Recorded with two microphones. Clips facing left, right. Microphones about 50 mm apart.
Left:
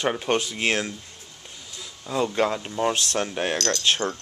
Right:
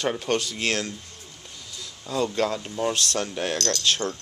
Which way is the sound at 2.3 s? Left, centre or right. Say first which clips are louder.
Left 2 dB; left.